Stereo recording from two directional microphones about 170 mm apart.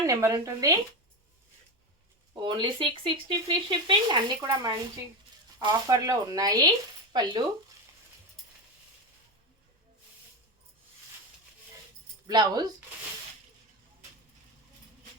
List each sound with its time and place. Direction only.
0.0 s speech: 20° right (ahead or behind)
2.3 s speech: 25° right (ahead or behind)
4.4 s a woman's voice: 15° right (ahead or behind)
12.3 s speech: 25° right (ahead or behind)